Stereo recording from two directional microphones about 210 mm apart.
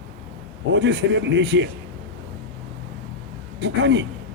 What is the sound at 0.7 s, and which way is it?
Speech, 55° right (ahead or behind).